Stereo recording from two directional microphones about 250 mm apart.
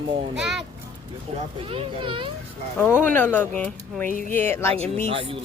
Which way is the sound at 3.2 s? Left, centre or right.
Centre.